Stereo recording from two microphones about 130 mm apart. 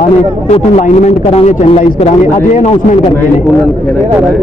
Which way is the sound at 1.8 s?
65° left (ahead or behind).